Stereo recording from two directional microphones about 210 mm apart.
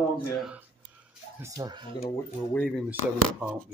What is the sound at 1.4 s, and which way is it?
Speech, 20° right (ahead or behind).